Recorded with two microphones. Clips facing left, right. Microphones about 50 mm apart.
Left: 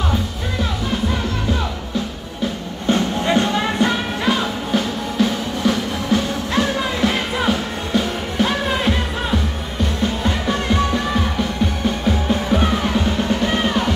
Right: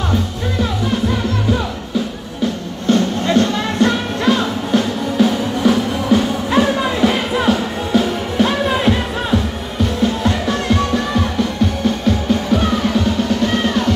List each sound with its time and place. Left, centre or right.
2.9 s music: centre